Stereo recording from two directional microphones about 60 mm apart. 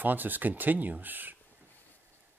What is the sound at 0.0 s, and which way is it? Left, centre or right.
A man's voice, right.